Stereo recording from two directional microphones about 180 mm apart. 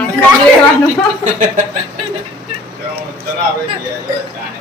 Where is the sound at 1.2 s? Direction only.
40° right (ahead or behind).